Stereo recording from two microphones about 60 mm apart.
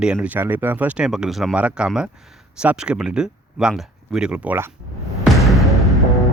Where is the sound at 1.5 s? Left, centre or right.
Centre.